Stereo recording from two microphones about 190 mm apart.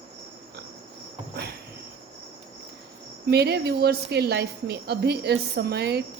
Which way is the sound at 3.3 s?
60° right (ahead or behind).